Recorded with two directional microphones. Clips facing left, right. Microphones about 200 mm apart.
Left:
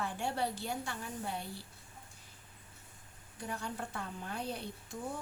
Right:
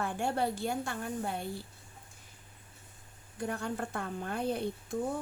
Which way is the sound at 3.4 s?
55° right (ahead or behind).